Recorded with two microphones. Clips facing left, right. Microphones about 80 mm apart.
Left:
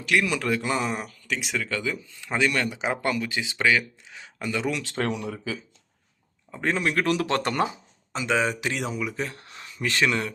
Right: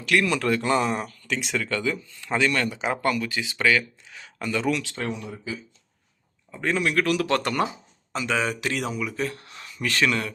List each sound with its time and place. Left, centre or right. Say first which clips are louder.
0.0 s speech: right 2 dB; centre
4.9 s speech: left 3 dB; left
6.5 s speech: right 1 dB; left